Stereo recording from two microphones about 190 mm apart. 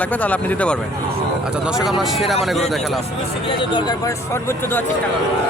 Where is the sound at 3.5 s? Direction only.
25° left (ahead or behind).